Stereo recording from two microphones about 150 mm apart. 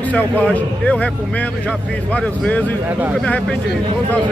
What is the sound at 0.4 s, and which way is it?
A man's voice, 10° left (ahead or behind).